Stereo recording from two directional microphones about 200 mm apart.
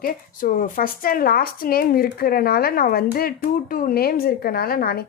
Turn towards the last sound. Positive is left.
turn(degrees=50)  # may be behind; listen again after turning